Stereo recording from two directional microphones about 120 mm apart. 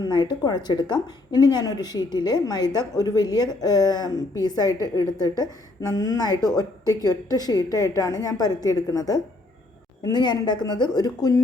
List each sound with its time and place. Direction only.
0.0 s a woman's voice: 35° left (ahead or behind)